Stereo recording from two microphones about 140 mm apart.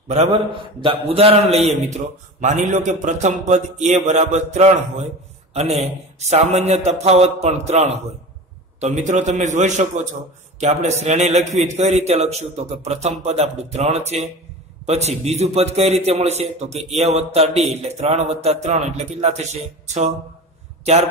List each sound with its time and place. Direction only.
0.1 s a man's voice: 50° right (ahead or behind)
0.7 s a man's voice: 40° right (ahead or behind)
2.4 s a man's voice: 60° right (ahead or behind)
20.9 s a man's voice: 50° right (ahead or behind)